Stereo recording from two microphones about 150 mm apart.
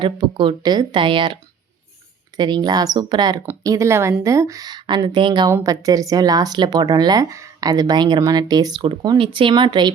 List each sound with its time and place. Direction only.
0.0 s speech: 35° right (ahead or behind)
5.5 s speech: 20° right (ahead or behind)